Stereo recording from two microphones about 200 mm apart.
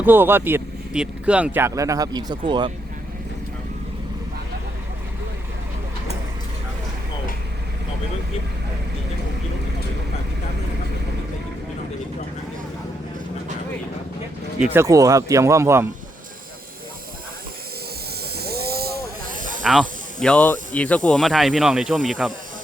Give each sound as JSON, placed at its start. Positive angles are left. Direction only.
{"t": 0.0, "sound": "speech", "side_deg": -10}
{"t": 14.7, "sound": "speech", "side_deg": -15}
{"t": 18.3, "sound": "a sound", "side_deg": -50}
{"t": 19.3, "sound": "snake", "side_deg": -40}
{"t": 19.6, "sound": "speech", "side_deg": 0}